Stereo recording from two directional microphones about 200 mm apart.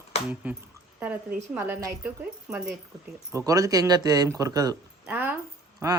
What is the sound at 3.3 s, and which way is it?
Speech, 15° right (ahead or behind).